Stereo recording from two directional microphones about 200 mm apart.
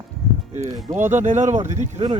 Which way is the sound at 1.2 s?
35° right (ahead or behind).